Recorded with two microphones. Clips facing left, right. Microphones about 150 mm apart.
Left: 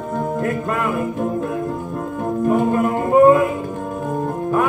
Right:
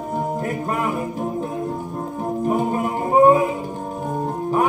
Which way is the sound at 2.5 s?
20° right (ahead or behind).